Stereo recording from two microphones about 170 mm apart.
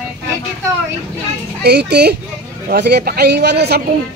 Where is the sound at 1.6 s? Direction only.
75° right (ahead or behind).